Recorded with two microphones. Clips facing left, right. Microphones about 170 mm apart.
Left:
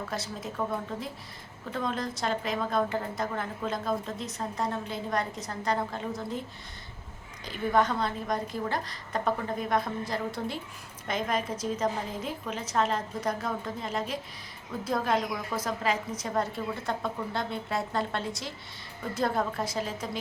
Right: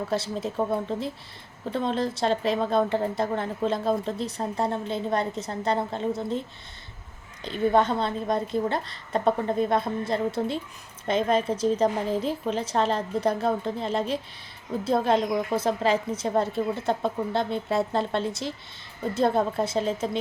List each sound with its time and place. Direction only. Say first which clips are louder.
0.1 s a woman's voice: right 8 dB; 30° right (ahead or behind)
7.4 s a woman's voice: right 4 dB; 25° right (ahead or behind)